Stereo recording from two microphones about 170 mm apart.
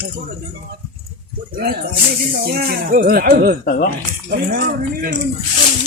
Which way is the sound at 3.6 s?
55° left (ahead or behind).